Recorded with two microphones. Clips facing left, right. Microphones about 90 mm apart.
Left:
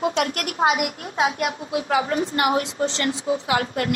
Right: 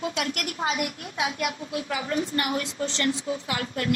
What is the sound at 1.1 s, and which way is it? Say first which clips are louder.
Speech: left 8 dB; 40° left (ahead or behind).